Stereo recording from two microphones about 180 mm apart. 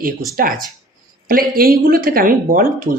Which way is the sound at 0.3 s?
55° right (ahead or behind).